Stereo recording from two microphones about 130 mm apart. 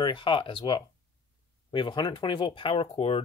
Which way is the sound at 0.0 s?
40° left (ahead or behind).